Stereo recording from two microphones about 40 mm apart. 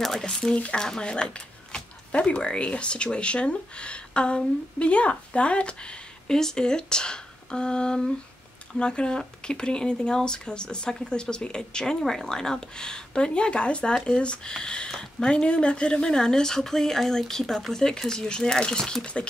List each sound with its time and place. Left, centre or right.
0.0 s a woman's voice: centre
14.9 s a woman's voice: centre
15.2 s a woman's voice: left